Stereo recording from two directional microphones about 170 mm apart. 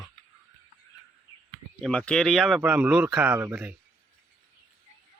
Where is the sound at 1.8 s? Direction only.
5° left (ahead or behind).